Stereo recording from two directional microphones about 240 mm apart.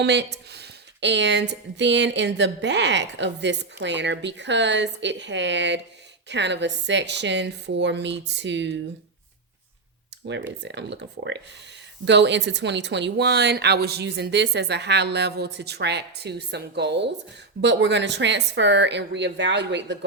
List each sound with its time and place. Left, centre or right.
0.0 s speech: right
10.3 s speech: right